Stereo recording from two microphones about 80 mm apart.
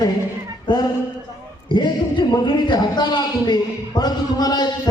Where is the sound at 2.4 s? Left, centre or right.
Left.